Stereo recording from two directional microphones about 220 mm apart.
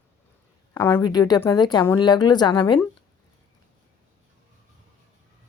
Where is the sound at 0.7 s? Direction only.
15° left (ahead or behind).